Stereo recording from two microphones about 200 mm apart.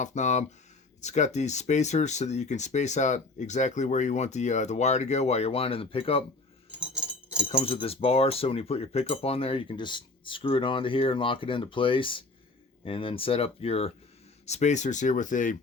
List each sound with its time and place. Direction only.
0.0 s speech: 35° left (ahead or behind)
6.7 s keys jangling: 5° right (ahead or behind)
7.4 s speech: 30° left (ahead or behind)